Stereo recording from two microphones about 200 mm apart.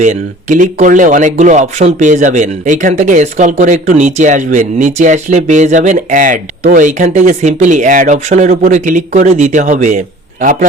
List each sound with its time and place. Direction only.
0.0 s speech: 40° right (ahead or behind)